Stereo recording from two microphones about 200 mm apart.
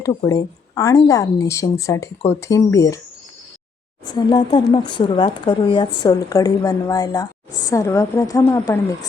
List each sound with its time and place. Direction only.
0.0 s speech: 20° left (ahead or behind)
4.0 s speech: 20° left (ahead or behind)